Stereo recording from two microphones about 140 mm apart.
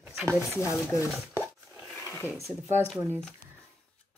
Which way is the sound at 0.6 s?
20° left (ahead or behind).